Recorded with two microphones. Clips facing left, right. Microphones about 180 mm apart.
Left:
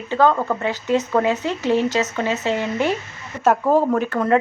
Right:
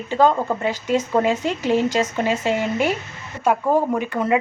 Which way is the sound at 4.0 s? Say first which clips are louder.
Left 2 dB; 10° right (ahead or behind).